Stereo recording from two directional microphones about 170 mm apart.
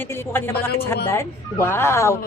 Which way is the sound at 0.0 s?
10° left (ahead or behind).